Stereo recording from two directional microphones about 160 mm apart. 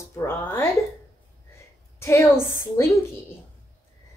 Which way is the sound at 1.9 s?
15° left (ahead or behind).